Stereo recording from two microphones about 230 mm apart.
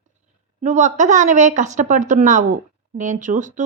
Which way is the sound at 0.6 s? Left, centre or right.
Right.